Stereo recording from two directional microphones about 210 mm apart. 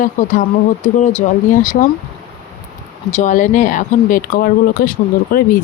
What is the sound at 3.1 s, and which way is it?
Speech, 35° left (ahead or behind).